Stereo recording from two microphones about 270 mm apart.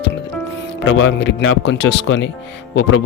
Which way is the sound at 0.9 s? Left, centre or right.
Left.